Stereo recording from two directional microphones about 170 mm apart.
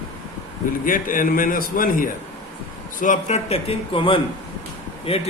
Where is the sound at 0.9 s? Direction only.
55° left (ahead or behind).